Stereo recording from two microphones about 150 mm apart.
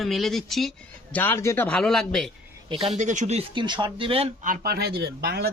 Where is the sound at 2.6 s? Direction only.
45° right (ahead or behind).